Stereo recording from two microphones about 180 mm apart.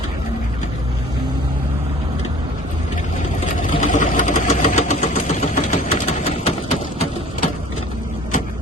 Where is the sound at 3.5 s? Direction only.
45° left (ahead or behind).